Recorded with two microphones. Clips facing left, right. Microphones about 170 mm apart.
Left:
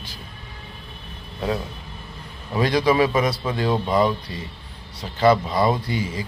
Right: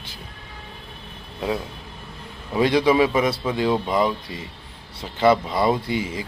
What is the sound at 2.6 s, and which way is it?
Speech, 20° right (ahead or behind).